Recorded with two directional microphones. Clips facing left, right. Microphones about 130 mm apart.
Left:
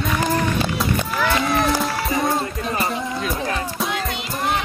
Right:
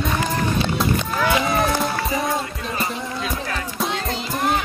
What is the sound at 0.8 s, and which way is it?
Run, centre (ahead or behind).